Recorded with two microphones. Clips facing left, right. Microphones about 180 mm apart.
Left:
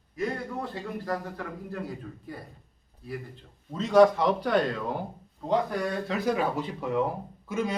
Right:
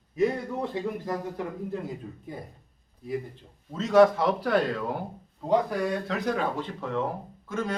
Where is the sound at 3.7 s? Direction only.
Centre (ahead or behind).